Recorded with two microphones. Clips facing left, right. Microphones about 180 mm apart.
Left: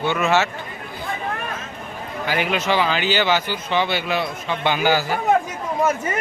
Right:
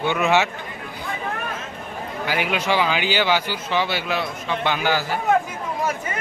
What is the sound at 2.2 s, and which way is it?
Speech, 10° right (ahead or behind).